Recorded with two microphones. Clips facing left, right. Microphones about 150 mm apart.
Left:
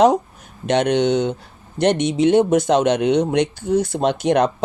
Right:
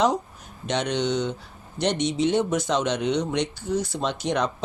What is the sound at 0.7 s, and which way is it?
Speech, 60° left (ahead or behind).